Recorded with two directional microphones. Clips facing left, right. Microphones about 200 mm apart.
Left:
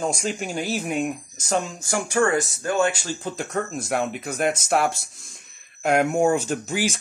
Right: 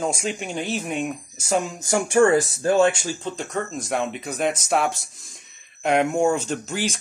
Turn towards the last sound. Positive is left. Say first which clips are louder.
# left 1 dB
turn(degrees=10)  # may be behind; listen again after turning